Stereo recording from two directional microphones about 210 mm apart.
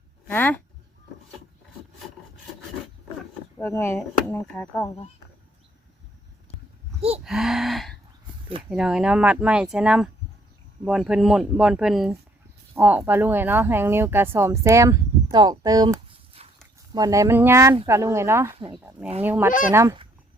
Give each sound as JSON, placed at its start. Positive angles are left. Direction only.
{"t": 0.3, "sound": "speech", "side_deg": 10}
{"t": 3.6, "sound": "speech", "side_deg": 10}
{"t": 7.3, "sound": "speech", "side_deg": -5}
{"t": 19.5, "sound": "speech", "side_deg": 40}
{"t": 19.7, "sound": "speech", "side_deg": -15}